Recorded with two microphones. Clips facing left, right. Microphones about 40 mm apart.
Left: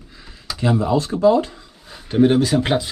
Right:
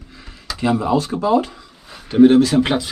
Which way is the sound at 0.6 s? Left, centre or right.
Right.